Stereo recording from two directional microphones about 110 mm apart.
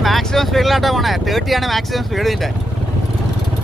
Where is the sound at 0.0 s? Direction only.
Centre (ahead or behind).